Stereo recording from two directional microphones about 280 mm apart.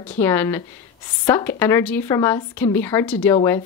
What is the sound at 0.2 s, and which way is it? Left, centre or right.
Speech, centre.